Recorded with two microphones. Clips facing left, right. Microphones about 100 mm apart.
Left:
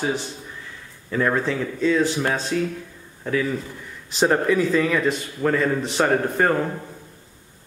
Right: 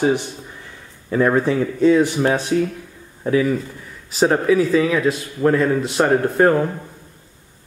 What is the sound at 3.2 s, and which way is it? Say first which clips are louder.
A man's voice: right 6 dB; 10° right (ahead or behind).